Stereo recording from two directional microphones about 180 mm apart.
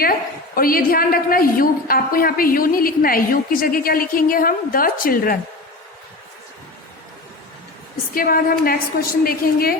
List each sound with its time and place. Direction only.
0.0 s a woman's voice: 55° left (ahead or behind)
8.1 s a woman's voice: 55° left (ahead or behind)